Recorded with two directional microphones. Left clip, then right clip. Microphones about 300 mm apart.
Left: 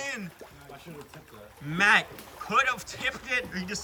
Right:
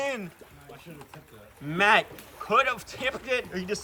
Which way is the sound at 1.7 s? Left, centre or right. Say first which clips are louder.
Right 1 dB; centre.